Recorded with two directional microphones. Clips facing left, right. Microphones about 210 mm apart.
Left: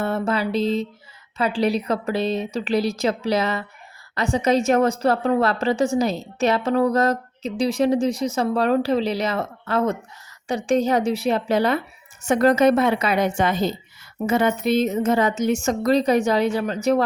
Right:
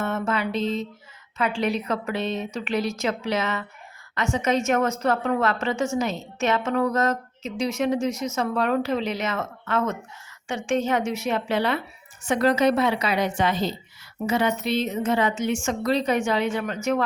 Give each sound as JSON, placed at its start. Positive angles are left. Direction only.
{"t": 0.0, "sound": "a woman's voice", "side_deg": 35}